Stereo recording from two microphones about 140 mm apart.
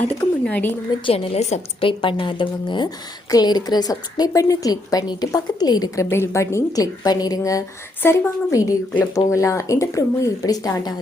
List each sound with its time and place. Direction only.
0.0 s speech: 10° left (ahead or behind)
1.0 s a woman's voice: 45° left (ahead or behind)
1.9 s a woman's voice: 35° left (ahead or behind)